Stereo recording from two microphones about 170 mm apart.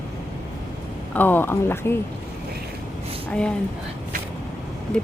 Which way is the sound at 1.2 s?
10° left (ahead or behind).